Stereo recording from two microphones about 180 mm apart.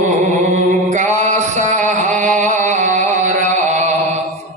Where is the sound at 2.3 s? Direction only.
45° right (ahead or behind).